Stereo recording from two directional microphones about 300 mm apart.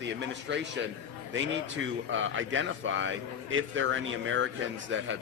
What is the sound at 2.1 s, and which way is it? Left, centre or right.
A man's voice, right.